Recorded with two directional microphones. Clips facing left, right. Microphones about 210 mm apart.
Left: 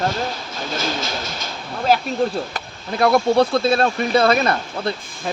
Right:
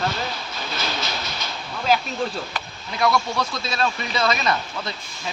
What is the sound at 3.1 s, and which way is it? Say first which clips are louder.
Speech: left 9 dB; 55° left (ahead or behind).